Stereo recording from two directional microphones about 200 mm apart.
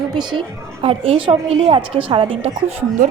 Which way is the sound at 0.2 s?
25° right (ahead or behind).